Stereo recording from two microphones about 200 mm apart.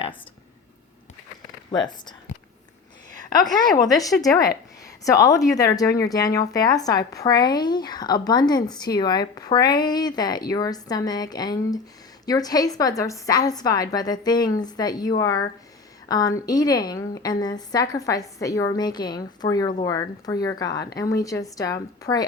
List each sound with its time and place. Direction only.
1.7 s speech: 20° left (ahead or behind)
3.2 s a woman's voice: 20° left (ahead or behind)